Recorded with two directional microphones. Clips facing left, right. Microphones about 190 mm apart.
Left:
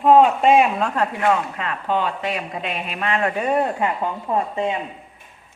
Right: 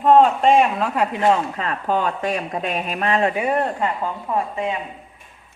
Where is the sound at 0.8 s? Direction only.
5° right (ahead or behind).